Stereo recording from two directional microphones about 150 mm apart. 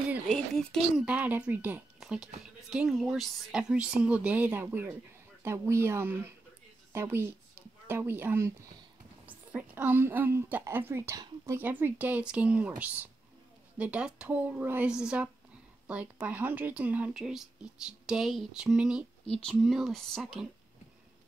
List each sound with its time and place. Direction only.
0.6 s speech: 5° left (ahead or behind)
1.0 s speech: 10° right (ahead or behind)
2.0 s a sound: 5° right (ahead or behind)
2.7 s a woman's voice: 5° right (ahead or behind)